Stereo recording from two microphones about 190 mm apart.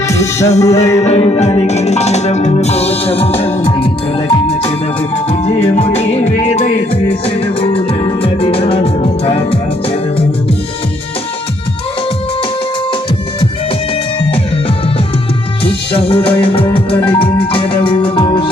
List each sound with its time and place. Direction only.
0.1 s music: 15° left (ahead or behind)
1.0 s music: 30° left (ahead or behind)
15.6 s music: 30° left (ahead or behind)